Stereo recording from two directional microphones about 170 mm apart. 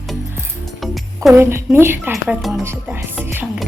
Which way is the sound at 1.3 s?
15° right (ahead or behind).